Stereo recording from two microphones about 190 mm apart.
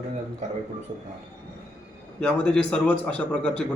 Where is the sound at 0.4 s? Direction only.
35° right (ahead or behind).